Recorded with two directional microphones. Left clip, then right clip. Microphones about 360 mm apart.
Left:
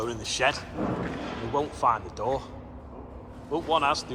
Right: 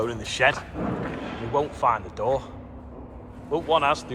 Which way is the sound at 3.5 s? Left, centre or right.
Centre.